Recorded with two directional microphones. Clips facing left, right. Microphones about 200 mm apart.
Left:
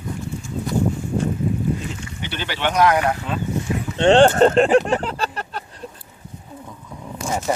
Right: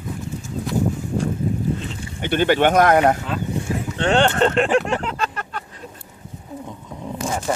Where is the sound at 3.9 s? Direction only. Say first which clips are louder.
Left 6 dB; 30° left (ahead or behind).